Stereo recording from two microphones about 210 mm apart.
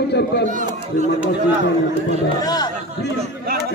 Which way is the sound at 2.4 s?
20° left (ahead or behind).